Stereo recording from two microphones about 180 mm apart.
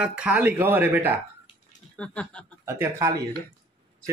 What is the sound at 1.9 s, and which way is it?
Speech, 5° left (ahead or behind).